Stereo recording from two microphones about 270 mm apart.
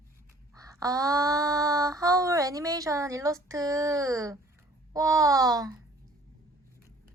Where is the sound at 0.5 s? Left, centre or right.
Centre.